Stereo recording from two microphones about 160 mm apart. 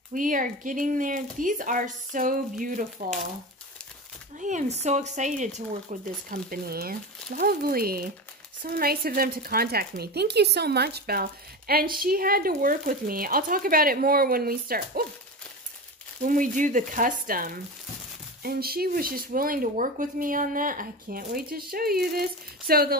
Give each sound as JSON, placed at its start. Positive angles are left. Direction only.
{"t": 0.1, "sound": "speech", "side_deg": -55}
{"t": 4.4, "sound": "speech", "side_deg": -50}
{"t": 6.3, "sound": "speech", "side_deg": -75}
{"t": 16.3, "sound": "speech", "side_deg": -55}